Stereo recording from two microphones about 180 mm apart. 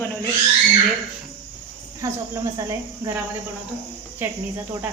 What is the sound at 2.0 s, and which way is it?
Speech, 15° right (ahead or behind).